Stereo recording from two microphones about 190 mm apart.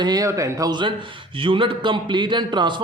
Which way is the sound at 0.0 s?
20° right (ahead or behind).